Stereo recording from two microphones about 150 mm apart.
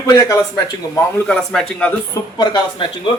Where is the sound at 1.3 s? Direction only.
5° left (ahead or behind).